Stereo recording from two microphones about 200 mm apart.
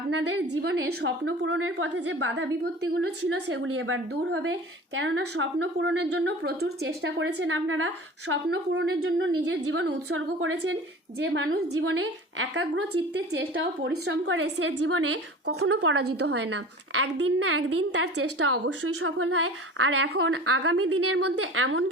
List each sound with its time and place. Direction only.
0.2 s a woman's voice: 60° right (ahead or behind)
1.2 s a woman's voice: 75° right (ahead or behind); by 4.5 s 90° right
4.9 s a woman's voice: 75° right (ahead or behind)
8.3 s speech: 60° right (ahead or behind)
9.5 s a woman's voice: 60° right (ahead or behind)
12.4 s speech: 70° right (ahead or behind); by 16.2 s 90° right
16.2 s a woman's voice: 60° right (ahead or behind); by 20.1 s 90° right
20.1 s speech: 65° right (ahead or behind); by 21.8 s 85° right